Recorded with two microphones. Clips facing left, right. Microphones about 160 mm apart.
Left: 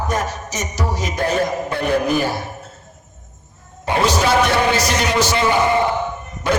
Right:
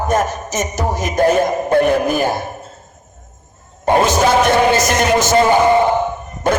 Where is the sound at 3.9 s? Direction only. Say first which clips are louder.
Right 4 dB; 45° right (ahead or behind).